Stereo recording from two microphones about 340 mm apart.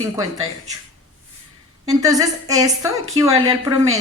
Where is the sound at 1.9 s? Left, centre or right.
Centre.